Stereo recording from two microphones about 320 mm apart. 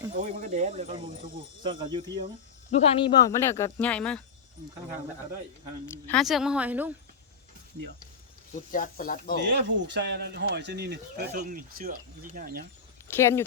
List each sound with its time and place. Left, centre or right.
0.2 s speech: right
2.7 s speech: centre
6.1 s a woman's voice: centre
8.5 s speech: left
9.4 s speech: right
13.1 s speech: centre